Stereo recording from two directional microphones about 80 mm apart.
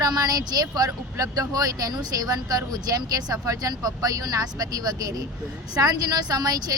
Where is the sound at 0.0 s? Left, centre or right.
Right.